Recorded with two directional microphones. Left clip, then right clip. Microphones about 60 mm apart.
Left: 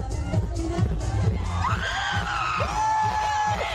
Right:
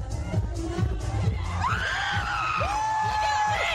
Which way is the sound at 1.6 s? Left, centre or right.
Right.